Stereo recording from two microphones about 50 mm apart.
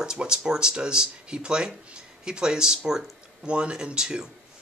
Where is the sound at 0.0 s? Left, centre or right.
Centre.